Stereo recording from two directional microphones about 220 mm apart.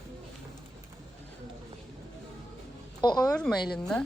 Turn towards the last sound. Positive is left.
turn(degrees=5)  # may be behind; listen again after turning